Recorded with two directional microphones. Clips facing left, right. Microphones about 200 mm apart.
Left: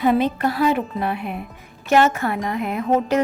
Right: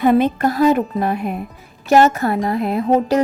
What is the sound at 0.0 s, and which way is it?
A woman's voice, 50° right (ahead or behind).